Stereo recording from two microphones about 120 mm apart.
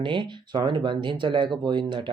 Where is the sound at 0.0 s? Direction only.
40° right (ahead or behind).